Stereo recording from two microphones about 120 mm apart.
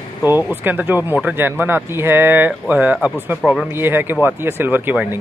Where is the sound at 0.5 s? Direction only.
15° right (ahead or behind).